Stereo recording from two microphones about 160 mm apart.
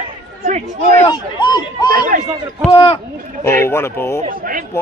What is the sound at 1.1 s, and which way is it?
Speech, 25° left (ahead or behind).